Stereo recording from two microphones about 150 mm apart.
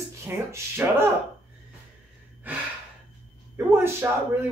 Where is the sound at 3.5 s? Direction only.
15° right (ahead or behind).